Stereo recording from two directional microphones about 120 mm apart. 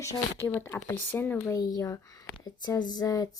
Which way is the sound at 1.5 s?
30° left (ahead or behind).